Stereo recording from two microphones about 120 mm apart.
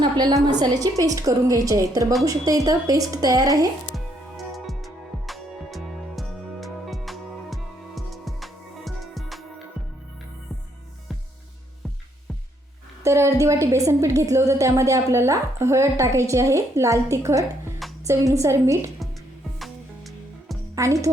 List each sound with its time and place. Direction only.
0.0 s a woman's voice: 35° right (ahead or behind)
3.9 s music: centre (ahead or behind)
13.0 s a woman's voice: 25° right (ahead or behind)
19.5 s music: centre (ahead or behind)
20.7 s a woman's voice: 25° right (ahead or behind)